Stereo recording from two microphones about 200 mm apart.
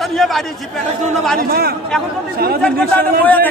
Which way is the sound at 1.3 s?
50° right (ahead or behind).